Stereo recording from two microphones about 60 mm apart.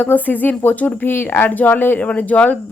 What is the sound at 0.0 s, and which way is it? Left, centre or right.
Speech, left.